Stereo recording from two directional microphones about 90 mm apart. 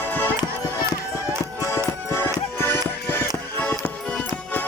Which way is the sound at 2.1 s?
25° left (ahead or behind).